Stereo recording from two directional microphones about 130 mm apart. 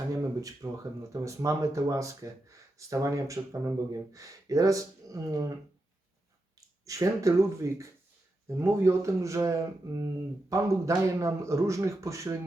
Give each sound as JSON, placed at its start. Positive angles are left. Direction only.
{"t": 0.1, "sound": "a sound", "side_deg": -25}
{"t": 1.1, "sound": "speech", "side_deg": -25}
{"t": 6.8, "sound": "speech", "side_deg": -25}